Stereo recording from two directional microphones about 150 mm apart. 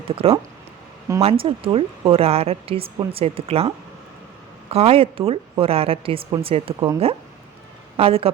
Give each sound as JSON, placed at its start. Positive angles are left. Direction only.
{"t": 0.2, "sound": "speech", "side_deg": -40}
{"t": 4.7, "sound": "speech", "side_deg": -40}